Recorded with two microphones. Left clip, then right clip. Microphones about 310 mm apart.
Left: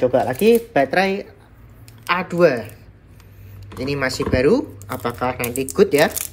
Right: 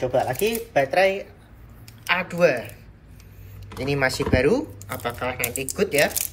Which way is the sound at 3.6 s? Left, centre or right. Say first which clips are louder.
Left 1 dB; centre.